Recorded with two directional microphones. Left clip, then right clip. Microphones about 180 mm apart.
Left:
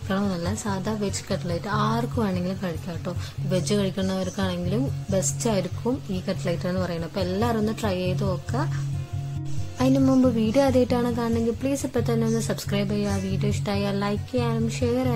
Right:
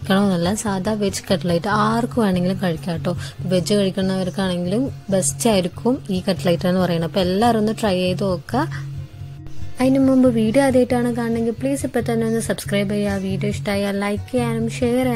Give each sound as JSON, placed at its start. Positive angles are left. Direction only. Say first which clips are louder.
{"t": 0.1, "sound": "a woman's voice", "louder": "right 9 dB", "side_deg": -45}
{"t": 9.8, "sound": "speech", "louder": "right 5 dB", "side_deg": -25}